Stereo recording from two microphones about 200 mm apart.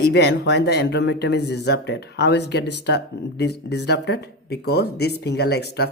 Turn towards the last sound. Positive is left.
turn(degrees=55)  # may be behind; listen again after turning